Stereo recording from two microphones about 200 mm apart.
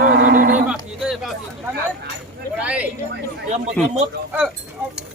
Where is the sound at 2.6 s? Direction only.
5° right (ahead or behind).